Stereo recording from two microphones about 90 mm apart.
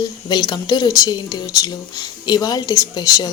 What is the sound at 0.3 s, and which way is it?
Speech, 50° left (ahead or behind).